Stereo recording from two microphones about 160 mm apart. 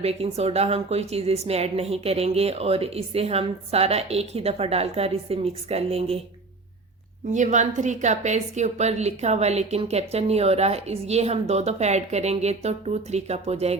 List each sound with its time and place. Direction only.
0.0 s a woman's voice: 40° right (ahead or behind)
7.3 s a woman's voice: 50° right (ahead or behind)